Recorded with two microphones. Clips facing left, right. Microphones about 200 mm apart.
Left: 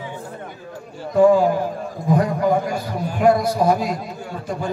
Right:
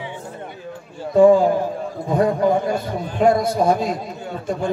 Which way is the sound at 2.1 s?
25° right (ahead or behind).